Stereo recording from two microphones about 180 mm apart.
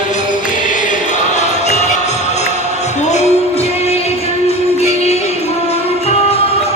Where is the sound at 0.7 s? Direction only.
45° left (ahead or behind).